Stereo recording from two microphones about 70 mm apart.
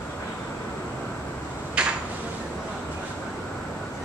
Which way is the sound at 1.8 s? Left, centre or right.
Centre.